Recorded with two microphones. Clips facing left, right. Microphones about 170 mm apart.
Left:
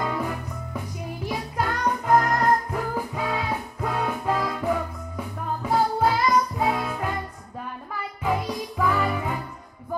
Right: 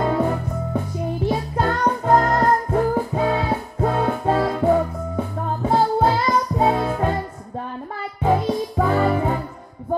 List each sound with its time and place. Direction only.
0.0 s music: 35° right (ahead or behind)